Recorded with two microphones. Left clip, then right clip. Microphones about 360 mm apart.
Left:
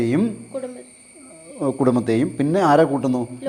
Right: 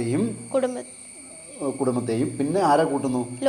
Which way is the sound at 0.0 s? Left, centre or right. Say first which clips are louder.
Left 5 dB; left.